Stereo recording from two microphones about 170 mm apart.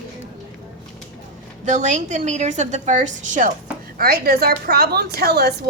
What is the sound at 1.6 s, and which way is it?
A woman's voice, 45° right (ahead or behind).